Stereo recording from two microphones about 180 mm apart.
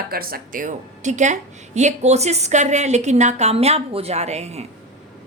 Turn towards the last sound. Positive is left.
turn(degrees=-35)  # may be behind; listen again after turning